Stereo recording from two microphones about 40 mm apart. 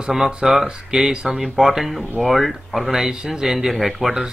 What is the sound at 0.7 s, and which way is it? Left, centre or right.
Speech, centre.